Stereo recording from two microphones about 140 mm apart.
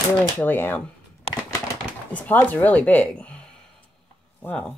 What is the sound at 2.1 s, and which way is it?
Speech, 10° left (ahead or behind).